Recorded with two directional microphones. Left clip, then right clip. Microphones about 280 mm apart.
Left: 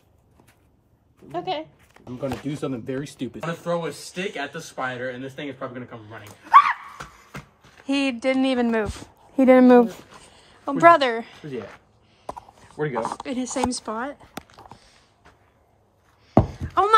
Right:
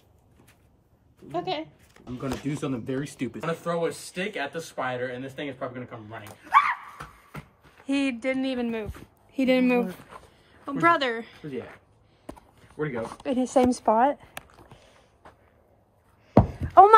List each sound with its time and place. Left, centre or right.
1.3 s speech: centre
7.8 s speech: centre
9.3 s speech: left
9.6 s a woman's voice: centre
12.8 s speech: left
13.2 s speech: centre
16.3 s a sound: centre